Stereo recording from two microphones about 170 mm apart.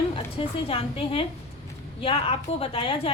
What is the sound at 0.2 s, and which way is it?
A woman's voice, 35° left (ahead or behind).